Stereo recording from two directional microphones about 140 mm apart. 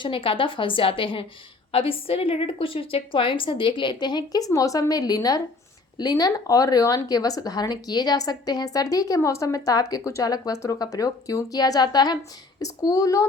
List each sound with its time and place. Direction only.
0.0 s a woman's voice: 40° left (ahead or behind)